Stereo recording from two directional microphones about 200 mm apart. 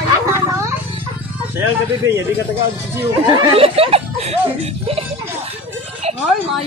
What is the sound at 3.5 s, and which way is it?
Speech, 30° right (ahead or behind).